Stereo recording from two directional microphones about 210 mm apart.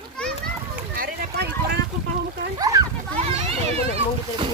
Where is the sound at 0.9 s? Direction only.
45° right (ahead or behind).